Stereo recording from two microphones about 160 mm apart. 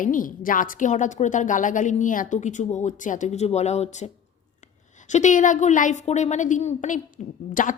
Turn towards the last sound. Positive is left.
turn(degrees=55)  # may be behind; listen again after turning